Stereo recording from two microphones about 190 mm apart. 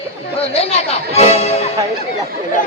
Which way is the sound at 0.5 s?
30° left (ahead or behind).